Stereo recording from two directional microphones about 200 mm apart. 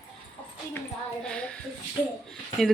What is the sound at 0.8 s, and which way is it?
Speech, 5° left (ahead or behind).